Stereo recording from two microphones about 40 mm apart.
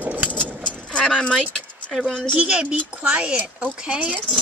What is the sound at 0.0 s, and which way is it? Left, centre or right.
Vehicle, right.